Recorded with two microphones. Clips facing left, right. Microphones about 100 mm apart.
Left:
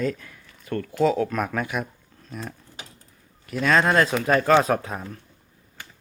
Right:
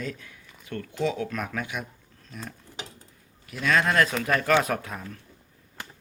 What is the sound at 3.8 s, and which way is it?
Speech, 30° left (ahead or behind).